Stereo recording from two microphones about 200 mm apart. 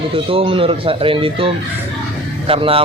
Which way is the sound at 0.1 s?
25° right (ahead or behind).